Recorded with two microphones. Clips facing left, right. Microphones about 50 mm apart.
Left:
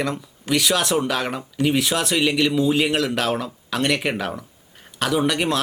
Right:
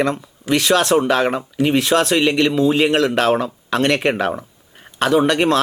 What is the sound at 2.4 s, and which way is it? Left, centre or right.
Speech, centre.